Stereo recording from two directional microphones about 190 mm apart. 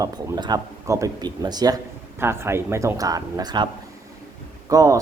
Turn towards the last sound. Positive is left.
turn(degrees=-20)  # may be behind; listen again after turning